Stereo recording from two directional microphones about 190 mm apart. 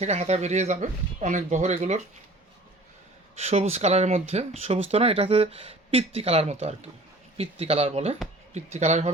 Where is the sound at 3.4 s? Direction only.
35° right (ahead or behind).